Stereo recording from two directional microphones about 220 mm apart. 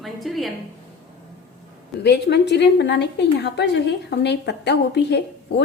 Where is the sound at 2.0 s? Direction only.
50° left (ahead or behind).